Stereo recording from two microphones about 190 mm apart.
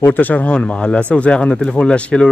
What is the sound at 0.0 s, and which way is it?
A man's voice, 10° left (ahead or behind).